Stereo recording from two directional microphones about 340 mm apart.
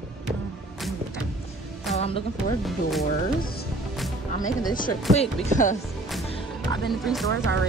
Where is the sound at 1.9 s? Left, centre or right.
Centre.